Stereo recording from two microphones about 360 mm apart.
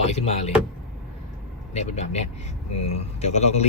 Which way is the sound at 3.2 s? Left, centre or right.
Centre.